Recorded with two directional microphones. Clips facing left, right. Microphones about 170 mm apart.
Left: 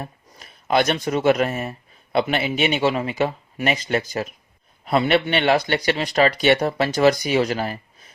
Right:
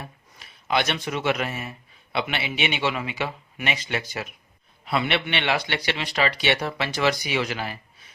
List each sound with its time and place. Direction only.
0.0 s speech: 45° left (ahead or behind)